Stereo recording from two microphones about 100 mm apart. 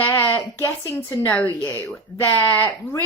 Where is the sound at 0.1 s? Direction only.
30° left (ahead or behind).